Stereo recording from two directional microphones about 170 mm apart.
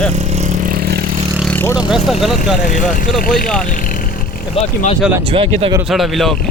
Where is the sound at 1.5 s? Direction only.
10° left (ahead or behind).